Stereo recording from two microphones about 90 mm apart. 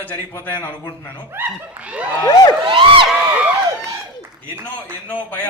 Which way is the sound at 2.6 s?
70° right (ahead or behind).